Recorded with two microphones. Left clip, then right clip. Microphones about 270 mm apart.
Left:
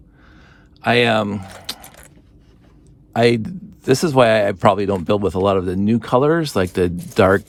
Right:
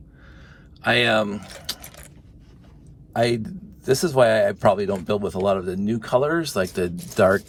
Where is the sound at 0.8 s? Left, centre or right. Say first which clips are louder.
Left 3 dB; left.